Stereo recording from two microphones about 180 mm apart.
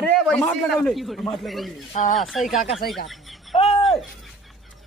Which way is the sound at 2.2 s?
Centre (ahead or behind).